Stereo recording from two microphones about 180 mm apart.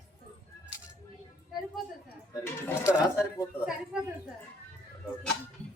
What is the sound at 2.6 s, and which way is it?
Speech, 15° left (ahead or behind).